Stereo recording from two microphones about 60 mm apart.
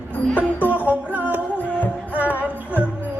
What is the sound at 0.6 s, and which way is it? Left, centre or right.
Music, right.